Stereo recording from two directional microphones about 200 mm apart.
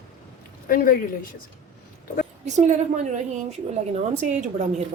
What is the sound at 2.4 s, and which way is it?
A woman's voice, 35° right (ahead or behind).